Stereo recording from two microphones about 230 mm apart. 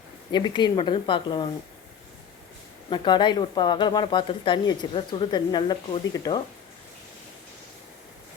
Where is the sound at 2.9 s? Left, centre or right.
Centre.